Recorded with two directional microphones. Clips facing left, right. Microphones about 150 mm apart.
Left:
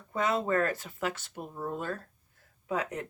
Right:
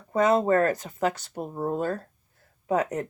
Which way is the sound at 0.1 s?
40° right (ahead or behind).